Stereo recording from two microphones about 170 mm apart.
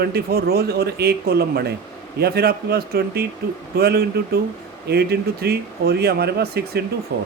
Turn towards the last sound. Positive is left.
turn(degrees=-70)  # may be behind; listen again after turning